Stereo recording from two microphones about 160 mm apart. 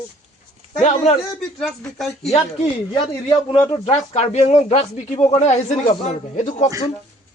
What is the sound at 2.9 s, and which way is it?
Speech, 30° left (ahead or behind).